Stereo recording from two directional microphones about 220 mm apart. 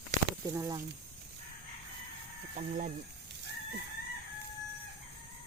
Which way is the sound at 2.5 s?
35° right (ahead or behind).